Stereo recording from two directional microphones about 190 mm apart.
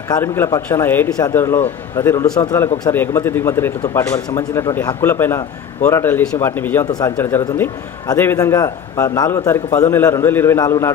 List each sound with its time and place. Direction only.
0.1 s a man's voice: 15° left (ahead or behind)